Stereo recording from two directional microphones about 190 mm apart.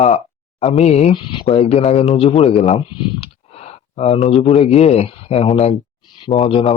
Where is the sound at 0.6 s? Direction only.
35° left (ahead or behind).